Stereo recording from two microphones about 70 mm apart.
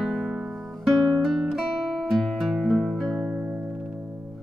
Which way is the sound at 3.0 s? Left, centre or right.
Centre.